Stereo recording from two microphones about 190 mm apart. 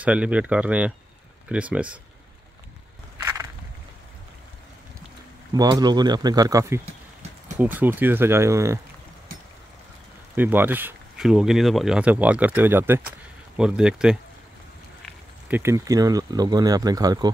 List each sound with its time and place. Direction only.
0.0 s speech: 5° right (ahead or behind)
5.5 s speech: 20° right (ahead or behind)
10.3 s speech: 10° right (ahead or behind)
15.4 s speech: 10° right (ahead or behind)